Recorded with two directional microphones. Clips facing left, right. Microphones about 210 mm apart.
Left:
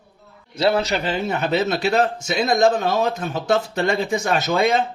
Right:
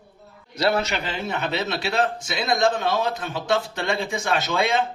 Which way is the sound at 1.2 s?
45° left (ahead or behind).